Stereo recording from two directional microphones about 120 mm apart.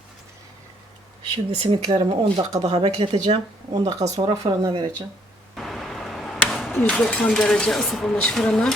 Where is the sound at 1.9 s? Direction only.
55° right (ahead or behind).